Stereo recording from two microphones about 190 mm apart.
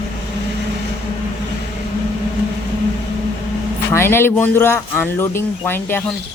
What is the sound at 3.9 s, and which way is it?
Speech, 10° left (ahead or behind).